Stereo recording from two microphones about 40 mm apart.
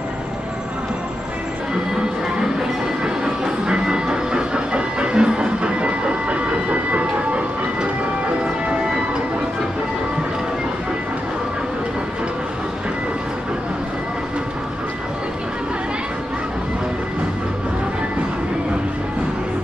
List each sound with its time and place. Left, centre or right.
3.0 s train: right